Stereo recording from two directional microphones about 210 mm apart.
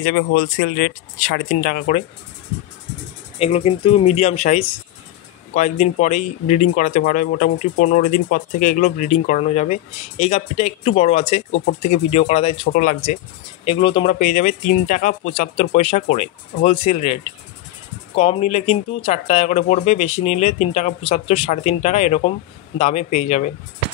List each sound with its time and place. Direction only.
0.4 s speech: 45° left (ahead or behind)
3.3 s speech: 30° left (ahead or behind)
12.7 s speech: 35° left (ahead or behind)
13.7 s speech: 25° left (ahead or behind)